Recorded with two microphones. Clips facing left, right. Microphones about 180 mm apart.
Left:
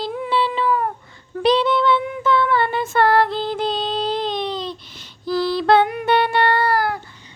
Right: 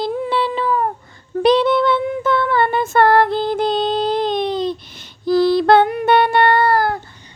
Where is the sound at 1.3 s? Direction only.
50° right (ahead or behind).